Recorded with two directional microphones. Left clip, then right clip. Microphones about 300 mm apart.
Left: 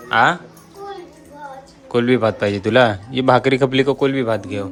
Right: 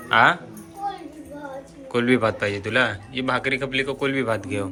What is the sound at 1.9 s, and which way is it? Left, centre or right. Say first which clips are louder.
Speech: left 4 dB; centre.